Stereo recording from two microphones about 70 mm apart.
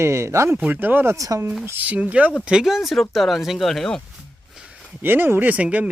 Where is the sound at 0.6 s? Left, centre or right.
Right.